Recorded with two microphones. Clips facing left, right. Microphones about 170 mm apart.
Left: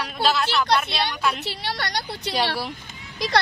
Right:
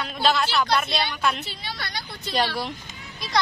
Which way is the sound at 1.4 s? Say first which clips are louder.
Left 6 dB; 70° left (ahead or behind).